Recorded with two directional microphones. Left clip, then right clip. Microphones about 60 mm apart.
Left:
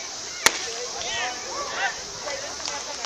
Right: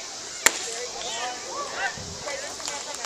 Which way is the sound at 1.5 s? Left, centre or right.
Centre.